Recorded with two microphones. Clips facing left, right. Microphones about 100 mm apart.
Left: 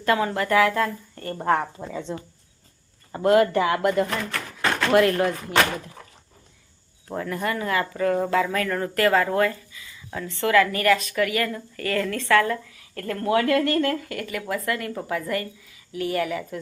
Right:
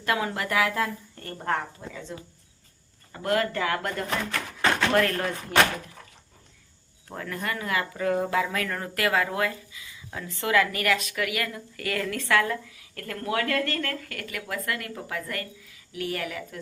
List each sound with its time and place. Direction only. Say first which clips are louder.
0.0 s a woman's voice: left 5 dB; 5° right (ahead or behind)
1.9 s speech: left 7 dB; 20° left (ahead or behind)
7.1 s a woman's voice: left 5 dB; 5° left (ahead or behind)